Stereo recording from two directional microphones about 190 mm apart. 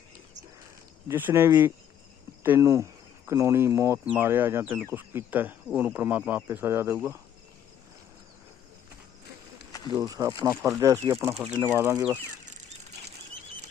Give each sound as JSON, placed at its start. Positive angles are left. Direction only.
{"t": 1.0, "sound": "speech", "side_deg": -10}
{"t": 9.9, "sound": "speech", "side_deg": -20}